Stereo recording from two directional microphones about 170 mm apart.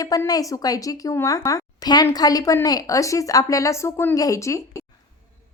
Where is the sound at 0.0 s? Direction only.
20° left (ahead or behind).